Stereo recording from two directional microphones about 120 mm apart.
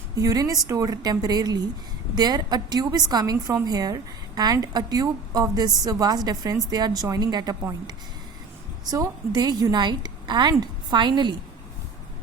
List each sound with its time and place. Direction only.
0.2 s a woman's voice: 30° right (ahead or behind)